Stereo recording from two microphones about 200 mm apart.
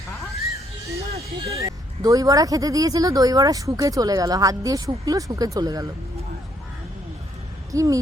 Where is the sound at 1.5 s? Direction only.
15° right (ahead or behind).